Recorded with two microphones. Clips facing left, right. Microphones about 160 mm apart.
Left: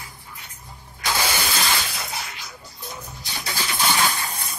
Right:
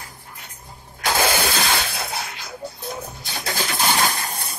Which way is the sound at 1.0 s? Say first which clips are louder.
Right 5 dB; 55° right (ahead or behind).